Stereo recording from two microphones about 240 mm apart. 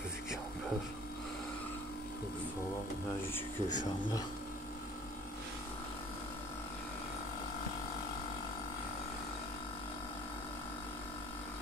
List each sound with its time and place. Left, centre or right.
3.6 s speech: left